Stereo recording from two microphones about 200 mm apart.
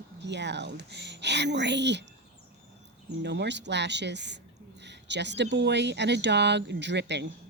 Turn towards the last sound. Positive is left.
turn(degrees=-60)  # may be behind; listen again after turning